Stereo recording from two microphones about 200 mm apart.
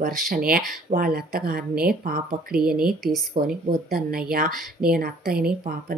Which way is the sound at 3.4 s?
25° right (ahead or behind).